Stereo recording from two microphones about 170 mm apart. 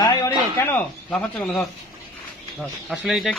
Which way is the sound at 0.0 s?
20° left (ahead or behind).